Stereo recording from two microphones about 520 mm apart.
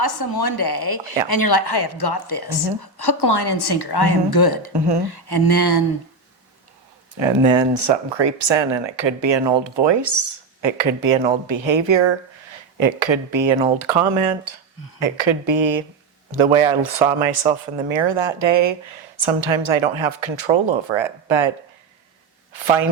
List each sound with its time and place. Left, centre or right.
0.0 s a woman's voice: left
4.7 s speech: right
5.0 s a woman's voice: left
7.2 s speech: right
13.7 s speech: right
17.1 s speech: right
17.8 s speech: right
22.5 s speech: right